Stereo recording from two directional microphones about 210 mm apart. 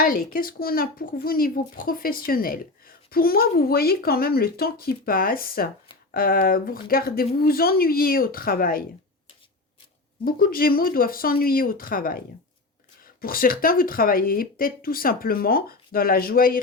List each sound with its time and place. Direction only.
0.0 s speech: 45° left (ahead or behind)
10.2 s speech: 45° left (ahead or behind)
13.2 s speech: 45° left (ahead or behind)